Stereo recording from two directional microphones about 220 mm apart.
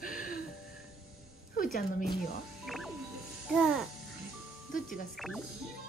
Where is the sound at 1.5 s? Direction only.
40° left (ahead or behind).